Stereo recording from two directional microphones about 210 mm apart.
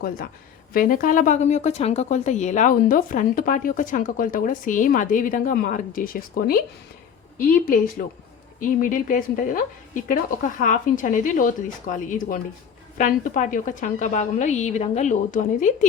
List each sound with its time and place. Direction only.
0.7 s a woman's voice: 45° left (ahead or behind)